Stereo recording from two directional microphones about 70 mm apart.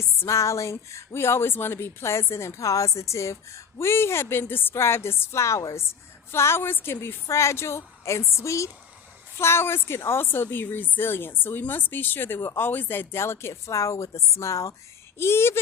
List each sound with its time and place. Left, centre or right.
0.0 s speech: left
9.4 s a woman's voice: left
15.2 s speech: left